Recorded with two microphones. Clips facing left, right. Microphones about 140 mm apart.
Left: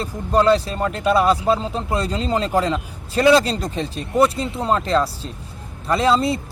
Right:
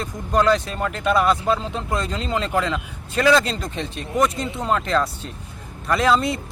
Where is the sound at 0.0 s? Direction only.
30° left (ahead or behind).